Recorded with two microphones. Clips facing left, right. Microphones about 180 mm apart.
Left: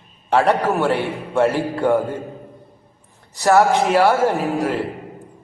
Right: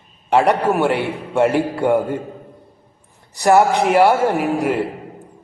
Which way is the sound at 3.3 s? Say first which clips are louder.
Right 1 dB; 15° right (ahead or behind).